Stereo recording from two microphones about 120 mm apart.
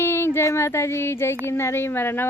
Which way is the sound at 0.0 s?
20° left (ahead or behind).